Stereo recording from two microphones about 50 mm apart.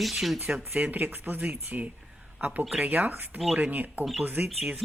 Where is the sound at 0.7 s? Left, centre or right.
Right.